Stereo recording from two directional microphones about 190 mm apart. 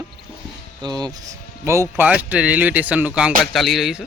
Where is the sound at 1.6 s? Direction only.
15° right (ahead or behind).